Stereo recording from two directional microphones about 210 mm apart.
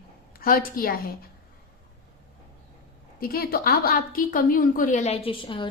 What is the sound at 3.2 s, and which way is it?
A woman's voice, 45° left (ahead or behind).